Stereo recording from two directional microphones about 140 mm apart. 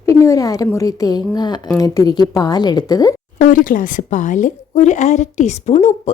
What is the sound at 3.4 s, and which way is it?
A woman's voice, 70° left (ahead or behind).